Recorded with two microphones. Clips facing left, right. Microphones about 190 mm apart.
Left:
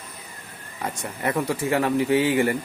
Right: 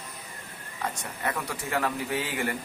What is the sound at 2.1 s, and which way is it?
Speech, 90° left.